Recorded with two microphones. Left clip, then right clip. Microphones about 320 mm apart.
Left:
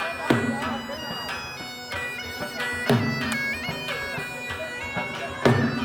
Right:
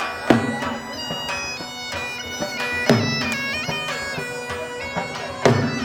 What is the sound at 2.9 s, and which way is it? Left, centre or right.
Bagpipes, right.